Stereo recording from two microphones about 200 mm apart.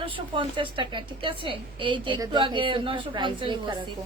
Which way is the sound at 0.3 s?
25° right (ahead or behind).